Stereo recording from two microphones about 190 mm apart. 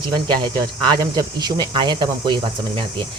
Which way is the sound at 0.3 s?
25° right (ahead or behind).